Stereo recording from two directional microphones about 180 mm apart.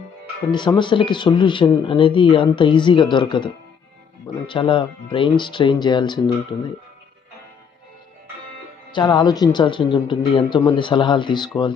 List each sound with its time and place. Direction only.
0.5 s speech: 25° left (ahead or behind)
8.9 s speech: 25° left (ahead or behind)